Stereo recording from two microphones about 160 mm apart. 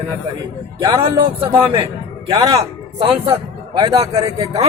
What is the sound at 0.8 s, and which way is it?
Speech, 25° right (ahead or behind).